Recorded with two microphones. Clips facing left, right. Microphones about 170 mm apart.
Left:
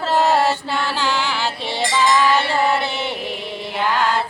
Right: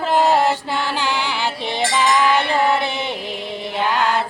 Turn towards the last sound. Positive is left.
turn(degrees=-20)  # may be behind; listen again after turning